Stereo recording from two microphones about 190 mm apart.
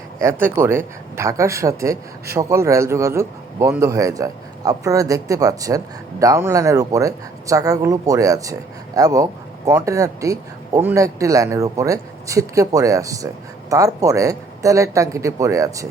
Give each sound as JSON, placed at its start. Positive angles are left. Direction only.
{"t": 0.2, "sound": "speech", "side_deg": -10}